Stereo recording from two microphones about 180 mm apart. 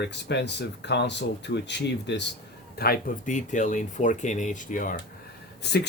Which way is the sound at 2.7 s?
60° left (ahead or behind).